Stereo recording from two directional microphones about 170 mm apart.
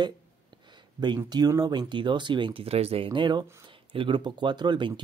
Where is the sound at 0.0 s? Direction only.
25° right (ahead or behind).